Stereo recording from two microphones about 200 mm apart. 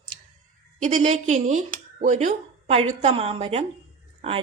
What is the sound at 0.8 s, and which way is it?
Speech, 35° right (ahead or behind).